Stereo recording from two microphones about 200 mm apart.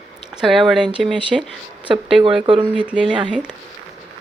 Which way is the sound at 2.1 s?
25° right (ahead or behind).